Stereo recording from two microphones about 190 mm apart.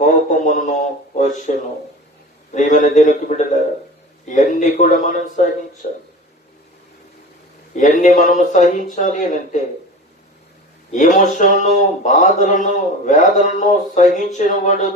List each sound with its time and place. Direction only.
0.0 s speech: 40° left (ahead or behind)
2.5 s speech: 40° left (ahead or behind)
7.7 s speech: 40° left (ahead or behind)
10.9 s speech: 40° left (ahead or behind)